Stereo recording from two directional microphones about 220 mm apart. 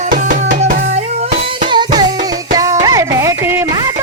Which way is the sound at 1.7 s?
20° right (ahead or behind).